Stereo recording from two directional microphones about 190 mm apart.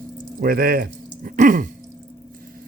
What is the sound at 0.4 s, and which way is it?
Speech, 50° right (ahead or behind).